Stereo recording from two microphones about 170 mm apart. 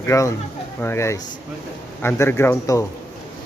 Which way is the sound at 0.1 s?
15° left (ahead or behind).